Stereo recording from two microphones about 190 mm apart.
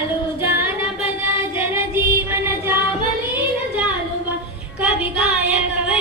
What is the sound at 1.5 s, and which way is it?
Music, 10° right (ahead or behind).